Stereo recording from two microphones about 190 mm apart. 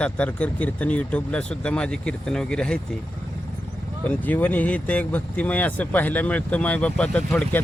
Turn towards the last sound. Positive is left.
turn(degrees=10)  # may be behind; listen again after turning